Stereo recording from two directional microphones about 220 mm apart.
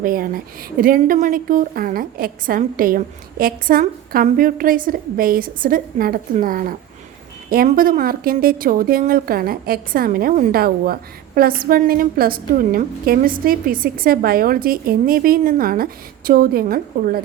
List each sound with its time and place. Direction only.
0.0 s a woman's voice: 40° right (ahead or behind)